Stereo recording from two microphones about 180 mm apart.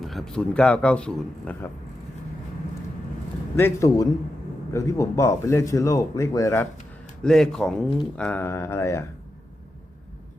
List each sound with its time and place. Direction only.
0.0 s a man's voice: centre (ahead or behind)
3.5 s speech: 15° left (ahead or behind)
7.2 s a man's voice: 5° left (ahead or behind)